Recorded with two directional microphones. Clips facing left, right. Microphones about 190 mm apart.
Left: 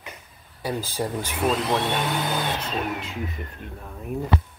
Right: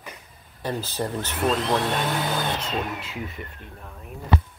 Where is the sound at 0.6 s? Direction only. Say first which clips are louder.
Left 1 dB; 10° left (ahead or behind).